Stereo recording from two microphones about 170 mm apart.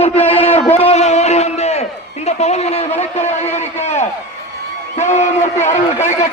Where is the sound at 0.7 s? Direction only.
40° left (ahead or behind).